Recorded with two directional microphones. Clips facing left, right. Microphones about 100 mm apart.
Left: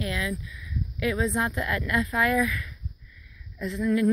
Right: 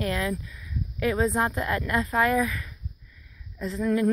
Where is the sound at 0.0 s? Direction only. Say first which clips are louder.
Right 3 dB; 45° right (ahead or behind).